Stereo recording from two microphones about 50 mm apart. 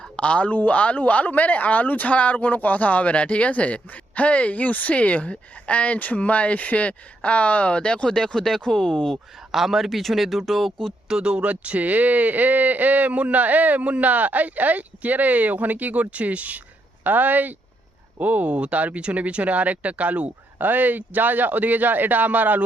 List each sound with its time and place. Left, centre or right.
0.2 s speech: left
9.5 s speech: centre
11.1 s speech: centre